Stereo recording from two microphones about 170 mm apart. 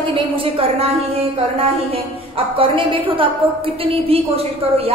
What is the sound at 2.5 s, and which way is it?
A woman's voice, 30° right (ahead or behind).